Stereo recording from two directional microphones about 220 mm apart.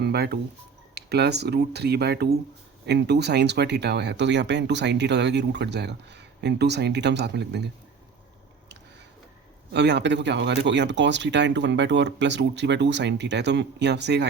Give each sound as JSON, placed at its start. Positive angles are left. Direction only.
{"t": 0.0, "sound": "speech", "side_deg": -45}
{"t": 9.7, "sound": "speech", "side_deg": -50}